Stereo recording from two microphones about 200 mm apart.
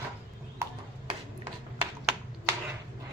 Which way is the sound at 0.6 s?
15° right (ahead or behind).